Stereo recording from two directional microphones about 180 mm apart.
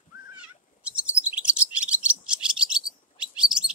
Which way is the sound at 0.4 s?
5° right (ahead or behind).